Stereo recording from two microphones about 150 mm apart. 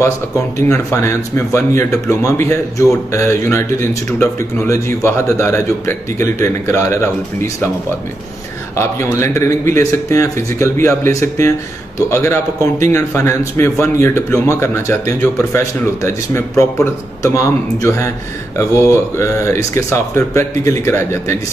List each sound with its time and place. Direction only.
0.6 s a man's voice: 20° left (ahead or behind)
8.7 s a man's voice: 20° left (ahead or behind)